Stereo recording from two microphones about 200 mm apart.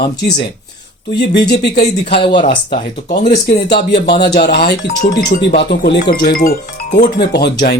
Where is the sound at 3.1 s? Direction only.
50° left (ahead or behind).